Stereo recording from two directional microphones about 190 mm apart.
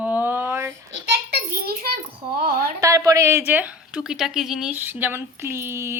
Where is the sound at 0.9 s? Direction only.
55° right (ahead or behind).